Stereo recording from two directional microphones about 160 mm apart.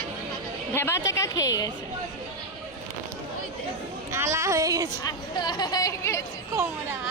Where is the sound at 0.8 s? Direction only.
15° left (ahead or behind).